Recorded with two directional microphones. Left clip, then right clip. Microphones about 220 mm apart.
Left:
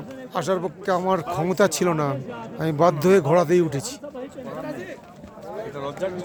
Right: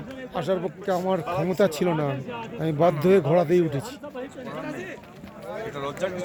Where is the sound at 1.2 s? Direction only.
40° right (ahead or behind).